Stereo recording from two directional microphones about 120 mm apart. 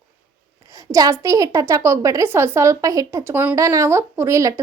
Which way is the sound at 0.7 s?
30° right (ahead or behind).